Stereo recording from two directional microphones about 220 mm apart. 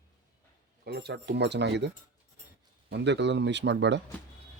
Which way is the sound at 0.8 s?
50° right (ahead or behind).